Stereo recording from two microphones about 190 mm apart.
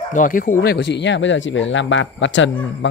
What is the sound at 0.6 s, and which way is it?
A man's voice, 70° left (ahead or behind).